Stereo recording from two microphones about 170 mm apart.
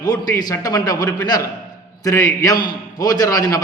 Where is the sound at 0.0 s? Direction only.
25° left (ahead or behind).